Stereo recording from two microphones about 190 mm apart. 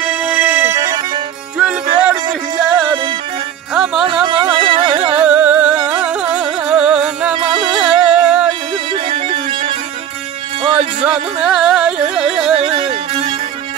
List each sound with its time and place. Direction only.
0.1 s organ: 10° right (ahead or behind)
1.6 s music: 5° right (ahead or behind)
2.2 s music: 20° right (ahead or behind)
3.7 s music: 5° right (ahead or behind)
4.0 s music: 25° right (ahead or behind)
5.1 s music: 5° right (ahead or behind)
8.9 s music: 25° right (ahead or behind)
11.4 s carnatic music: 5° right (ahead or behind)
12.5 s music: 30° right (ahead or behind)